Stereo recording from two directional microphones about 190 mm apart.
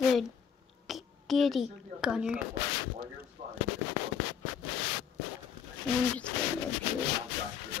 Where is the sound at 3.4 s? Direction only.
25° right (ahead or behind).